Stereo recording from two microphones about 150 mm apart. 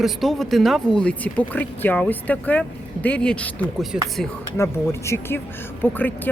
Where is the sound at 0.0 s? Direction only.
Centre (ahead or behind).